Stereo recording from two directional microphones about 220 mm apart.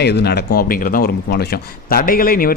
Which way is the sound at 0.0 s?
50° left (ahead or behind).